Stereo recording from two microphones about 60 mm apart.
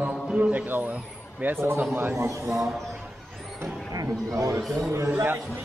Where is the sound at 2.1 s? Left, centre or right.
Right.